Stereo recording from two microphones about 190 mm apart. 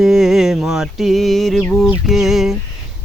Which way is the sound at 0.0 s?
Centre (ahead or behind).